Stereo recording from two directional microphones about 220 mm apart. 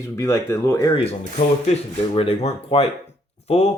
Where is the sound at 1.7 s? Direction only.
25° left (ahead or behind).